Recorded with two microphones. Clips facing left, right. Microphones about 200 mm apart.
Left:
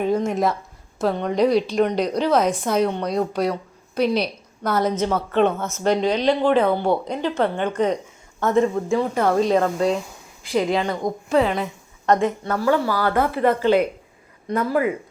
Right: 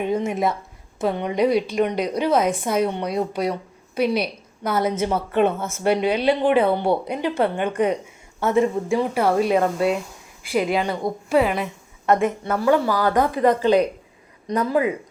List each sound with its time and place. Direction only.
0.3 s speech: centre (ahead or behind)
2.4 s a woman's voice: 55° right (ahead or behind)
2.6 s a woman's voice: 5° right (ahead or behind)
12.5 s a woman's voice: 25° right (ahead or behind)